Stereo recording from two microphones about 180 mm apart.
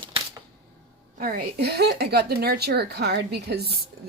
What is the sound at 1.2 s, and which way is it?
A woman's voice, 55° right (ahead or behind).